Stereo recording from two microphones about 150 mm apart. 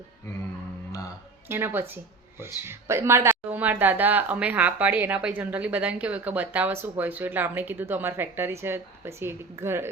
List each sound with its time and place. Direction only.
1.5 s a woman's voice: 15° right (ahead or behind)